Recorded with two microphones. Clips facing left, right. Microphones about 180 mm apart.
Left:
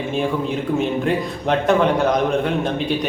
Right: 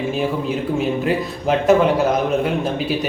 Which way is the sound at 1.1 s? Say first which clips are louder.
Right 1 dB; 5° right (ahead or behind).